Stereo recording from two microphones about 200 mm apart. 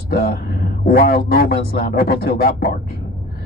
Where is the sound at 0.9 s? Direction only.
50° left (ahead or behind).